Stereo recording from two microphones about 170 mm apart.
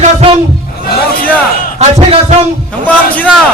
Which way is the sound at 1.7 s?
40° right (ahead or behind).